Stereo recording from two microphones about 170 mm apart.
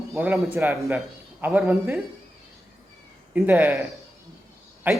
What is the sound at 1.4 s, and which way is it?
Speech, 10° right (ahead or behind).